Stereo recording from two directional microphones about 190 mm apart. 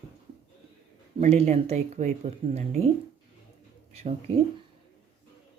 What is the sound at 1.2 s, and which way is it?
Speech, 35° right (ahead or behind).